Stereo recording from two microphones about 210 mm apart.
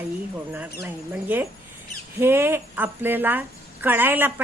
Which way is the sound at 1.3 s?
10° right (ahead or behind).